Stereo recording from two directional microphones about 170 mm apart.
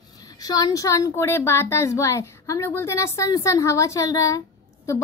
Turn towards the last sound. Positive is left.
turn(degrees=20)  # may be behind; listen again after turning